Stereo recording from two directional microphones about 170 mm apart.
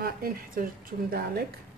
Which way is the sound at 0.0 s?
60° right (ahead or behind).